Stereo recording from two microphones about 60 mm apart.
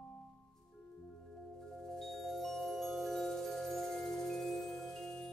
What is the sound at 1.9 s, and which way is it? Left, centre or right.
Mallet percussion, centre.